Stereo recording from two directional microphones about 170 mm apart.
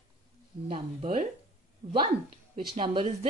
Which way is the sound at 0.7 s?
35° right (ahead or behind).